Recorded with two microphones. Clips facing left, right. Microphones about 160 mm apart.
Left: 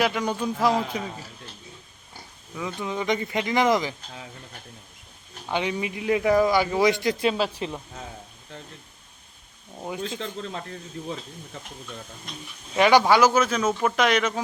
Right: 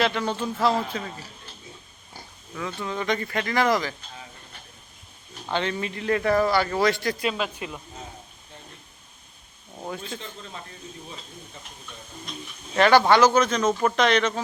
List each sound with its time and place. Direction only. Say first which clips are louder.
0.0 s a man's voice: even; 10° left (ahead or behind)
2.6 s a man's voice: left 1 dB; 15° left (ahead or behind)
5.5 s a man's voice: even; 10° left (ahead or behind)
7.3 s speech: left 4 dB; 35° left (ahead or behind)
10.2 s speech: left 7 dB; 75° left (ahead or behind)
12.7 s a man's voice: even; 10° left (ahead or behind)